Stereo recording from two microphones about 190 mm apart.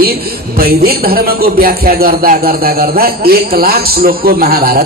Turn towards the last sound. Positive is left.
turn(degrees=-55)  # may be behind; listen again after turning